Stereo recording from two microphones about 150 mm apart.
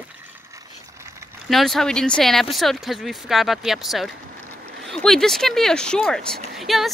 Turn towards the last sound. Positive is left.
turn(degrees=0)  # may be behind; listen again after turning